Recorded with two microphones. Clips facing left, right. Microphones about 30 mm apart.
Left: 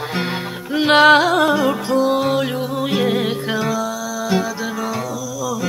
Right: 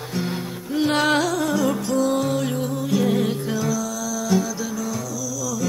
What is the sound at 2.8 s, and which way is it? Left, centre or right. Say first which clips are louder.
Music: left 3 dB; left.